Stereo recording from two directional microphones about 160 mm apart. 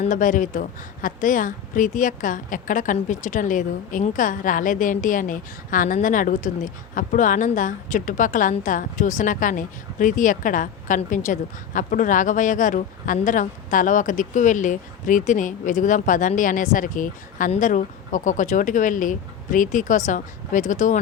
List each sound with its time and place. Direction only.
0.0 s a woman's voice: 55° left (ahead or behind)